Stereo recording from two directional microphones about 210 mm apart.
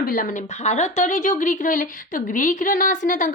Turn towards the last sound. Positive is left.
turn(degrees=40)  # may be behind; listen again after turning